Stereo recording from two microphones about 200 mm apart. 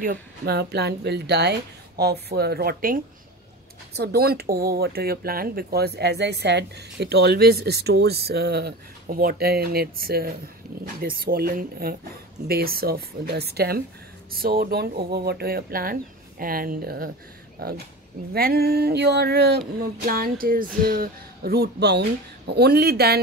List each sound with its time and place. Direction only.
0.0 s speech: 50° right (ahead or behind)